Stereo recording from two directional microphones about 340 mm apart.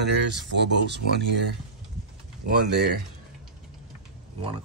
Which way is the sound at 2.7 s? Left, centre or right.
Right.